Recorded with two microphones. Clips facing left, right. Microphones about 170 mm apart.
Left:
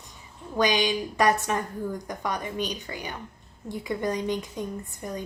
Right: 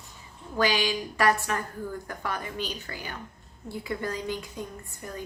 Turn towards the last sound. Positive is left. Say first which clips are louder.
# left 5 dB
turn(degrees=20)  # may be behind; listen again after turning